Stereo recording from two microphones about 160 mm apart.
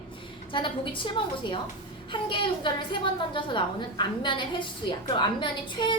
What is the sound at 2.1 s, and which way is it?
A woman's voice, 30° left (ahead or behind).